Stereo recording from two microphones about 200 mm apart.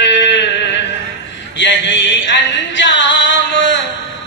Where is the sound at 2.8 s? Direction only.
65° left (ahead or behind).